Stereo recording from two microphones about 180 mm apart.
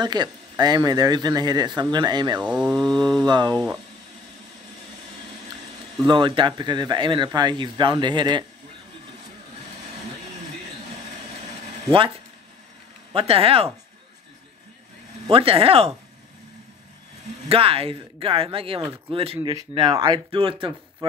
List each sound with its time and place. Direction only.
0.0 s speech: 25° right (ahead or behind)
2.4 s speech: 5° right (ahead or behind)
3.3 s speech: 25° right (ahead or behind)
6.0 s speech: 25° right (ahead or behind)
13.1 s speech: 30° right (ahead or behind)
15.2 s speech: 30° right (ahead or behind)
17.5 s speech: 30° right (ahead or behind)